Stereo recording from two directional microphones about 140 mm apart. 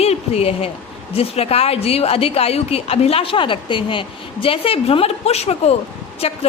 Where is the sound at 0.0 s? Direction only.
45° left (ahead or behind).